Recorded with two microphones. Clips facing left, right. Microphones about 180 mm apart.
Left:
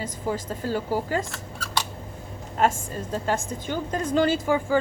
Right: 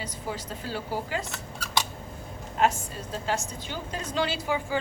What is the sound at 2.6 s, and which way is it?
A woman's voice, 45° left (ahead or behind).